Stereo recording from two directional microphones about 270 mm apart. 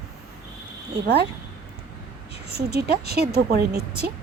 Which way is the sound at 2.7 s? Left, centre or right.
Right.